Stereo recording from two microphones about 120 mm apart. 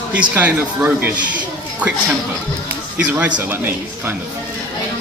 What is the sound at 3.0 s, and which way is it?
Speech, 10° right (ahead or behind).